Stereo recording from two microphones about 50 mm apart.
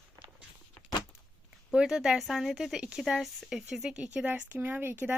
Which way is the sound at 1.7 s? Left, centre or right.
Centre.